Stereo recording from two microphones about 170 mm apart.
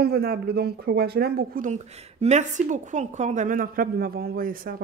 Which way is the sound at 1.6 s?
40° right (ahead or behind).